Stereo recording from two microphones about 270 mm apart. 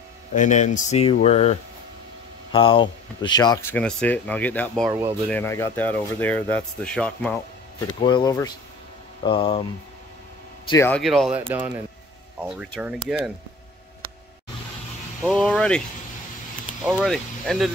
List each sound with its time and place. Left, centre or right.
0.3 s speech: left; by 4.8 s centre
4.8 s speech: centre
5.3 s speech: centre
8.0 s speech: centre
10.7 s speech: centre
12.4 s speech: centre
15.2 s speech: centre
16.8 s speech: centre